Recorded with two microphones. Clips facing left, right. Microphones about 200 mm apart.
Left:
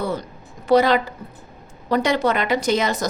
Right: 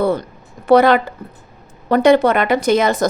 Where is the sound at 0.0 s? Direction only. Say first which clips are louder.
Right 8 dB; 55° right (ahead or behind).